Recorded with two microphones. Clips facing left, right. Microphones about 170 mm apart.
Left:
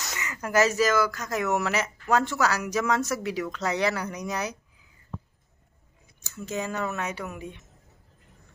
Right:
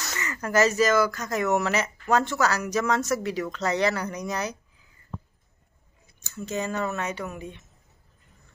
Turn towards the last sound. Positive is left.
turn(degrees=10)  # may be behind; listen again after turning